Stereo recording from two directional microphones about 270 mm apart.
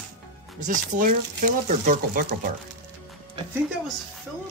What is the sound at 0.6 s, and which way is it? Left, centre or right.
Speech, right.